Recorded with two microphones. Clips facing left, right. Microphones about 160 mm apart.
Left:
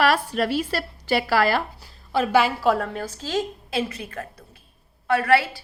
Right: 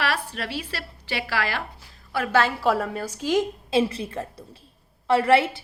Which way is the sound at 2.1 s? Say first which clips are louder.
Left 3 dB; 15° left (ahead or behind).